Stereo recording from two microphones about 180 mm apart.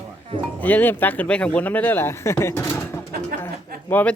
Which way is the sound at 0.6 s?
10° left (ahead or behind).